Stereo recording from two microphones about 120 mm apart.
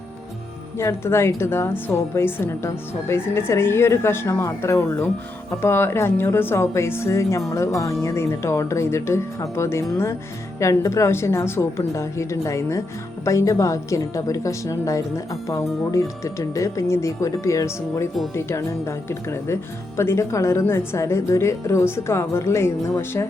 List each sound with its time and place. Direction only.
0.8 s a woman's voice: 20° left (ahead or behind)